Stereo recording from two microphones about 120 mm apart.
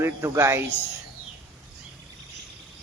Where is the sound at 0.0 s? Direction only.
20° right (ahead or behind).